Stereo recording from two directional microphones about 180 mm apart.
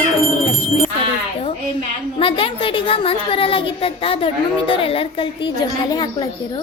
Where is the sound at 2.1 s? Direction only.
30° left (ahead or behind).